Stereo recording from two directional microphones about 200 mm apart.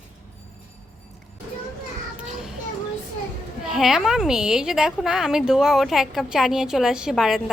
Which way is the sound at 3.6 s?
Centre (ahead or behind).